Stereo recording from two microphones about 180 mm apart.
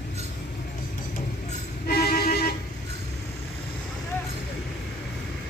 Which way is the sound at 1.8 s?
55° left (ahead or behind).